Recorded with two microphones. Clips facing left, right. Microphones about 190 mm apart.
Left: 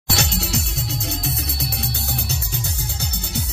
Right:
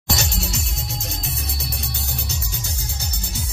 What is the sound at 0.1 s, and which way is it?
Music, 65° left (ahead or behind).